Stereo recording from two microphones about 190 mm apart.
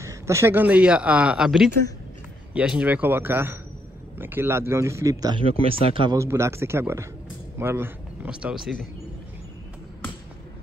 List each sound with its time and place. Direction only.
0.0 s speech: 15° right (ahead or behind)
6.1 s speech: 15° right (ahead or behind)